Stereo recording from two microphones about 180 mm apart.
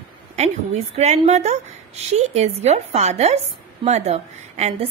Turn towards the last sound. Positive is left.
turn(degrees=-35)  # may be behind; listen again after turning